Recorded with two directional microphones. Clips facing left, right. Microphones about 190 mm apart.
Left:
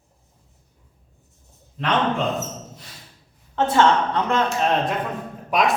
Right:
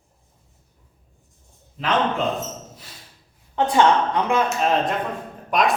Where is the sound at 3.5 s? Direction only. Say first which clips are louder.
Even; 15° right (ahead or behind); by 5.7 s centre (ahead or behind).